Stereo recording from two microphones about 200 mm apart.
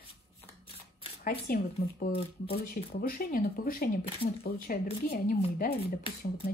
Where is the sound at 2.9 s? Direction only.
45° left (ahead or behind).